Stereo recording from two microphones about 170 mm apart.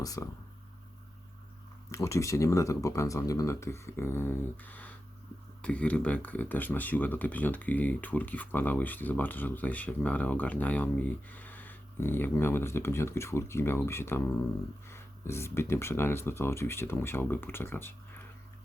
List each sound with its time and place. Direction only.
0.0 s speech: 20° left (ahead or behind)
1.9 s speech: 15° left (ahead or behind)